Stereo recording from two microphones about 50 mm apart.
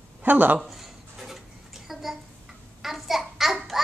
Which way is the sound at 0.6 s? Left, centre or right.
Centre.